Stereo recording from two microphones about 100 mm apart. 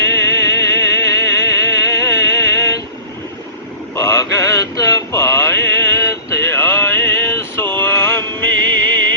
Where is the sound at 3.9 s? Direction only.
30° left (ahead or behind).